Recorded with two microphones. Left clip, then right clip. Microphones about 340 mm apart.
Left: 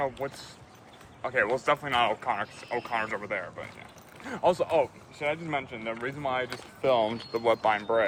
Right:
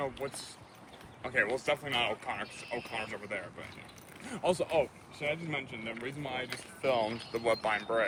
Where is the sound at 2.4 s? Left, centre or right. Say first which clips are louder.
Left 6 dB; left.